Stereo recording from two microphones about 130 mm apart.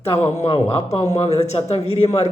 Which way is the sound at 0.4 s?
50° left (ahead or behind).